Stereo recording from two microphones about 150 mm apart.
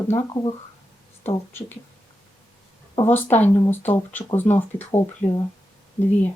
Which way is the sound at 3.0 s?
15° left (ahead or behind).